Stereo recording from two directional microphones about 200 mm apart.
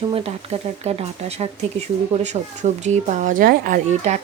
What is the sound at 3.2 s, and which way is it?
Speech, 45° right (ahead or behind).